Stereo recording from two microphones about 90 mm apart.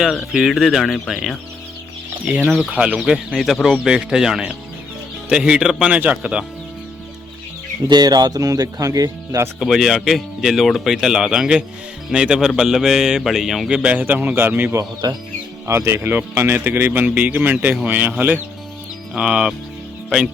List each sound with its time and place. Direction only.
0.0 s speech: centre (ahead or behind)
7.9 s speech: 50° right (ahead or behind)
9.6 s speech: 5° right (ahead or behind); by 14.8 s 25° right (ahead or behind)
15.0 s speech: 55° right (ahead or behind)
15.6 s speech: 30° right (ahead or behind)
19.1 s speech: 10° right (ahead or behind)